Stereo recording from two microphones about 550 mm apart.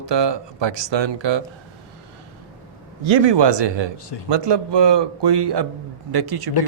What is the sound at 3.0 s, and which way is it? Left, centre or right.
Speech, right.